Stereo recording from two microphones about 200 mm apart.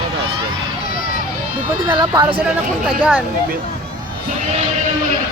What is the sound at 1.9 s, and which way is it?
Speech, 20° right (ahead or behind).